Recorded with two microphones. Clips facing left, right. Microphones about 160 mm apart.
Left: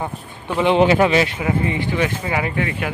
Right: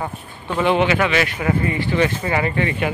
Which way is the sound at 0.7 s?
35° left (ahead or behind).